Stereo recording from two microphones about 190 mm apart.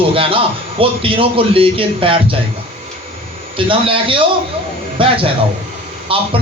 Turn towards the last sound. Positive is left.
turn(degrees=-30)  # may be behind; listen again after turning